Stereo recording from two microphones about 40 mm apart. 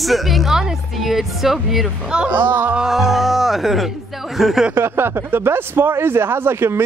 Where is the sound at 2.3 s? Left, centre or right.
Right.